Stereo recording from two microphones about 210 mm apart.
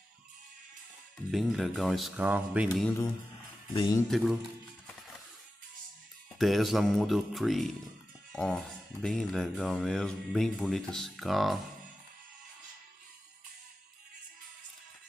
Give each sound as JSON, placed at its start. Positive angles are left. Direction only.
{"t": 1.3, "sound": "speech", "side_deg": 0}
{"t": 3.7, "sound": "speech", "side_deg": 20}
{"t": 4.1, "sound": "speech", "side_deg": -5}
{"t": 6.3, "sound": "speech", "side_deg": 0}